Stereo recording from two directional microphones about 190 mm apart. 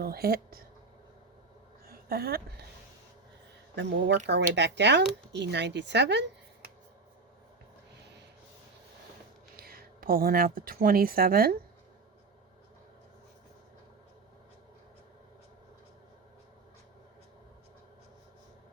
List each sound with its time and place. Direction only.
0.0 s speech: 55° right (ahead or behind)
1.9 s a sound: 55° right (ahead or behind)
3.8 s speech: 65° right (ahead or behind)
9.6 s speech: 50° right (ahead or behind)